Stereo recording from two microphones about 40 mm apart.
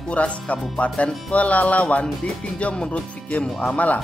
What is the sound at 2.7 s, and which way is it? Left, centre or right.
Speech, left.